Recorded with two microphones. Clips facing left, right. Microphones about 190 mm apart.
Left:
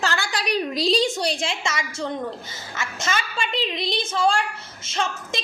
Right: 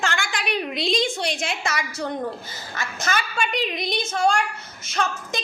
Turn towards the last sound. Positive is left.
turn(degrees=25)  # may be behind; listen again after turning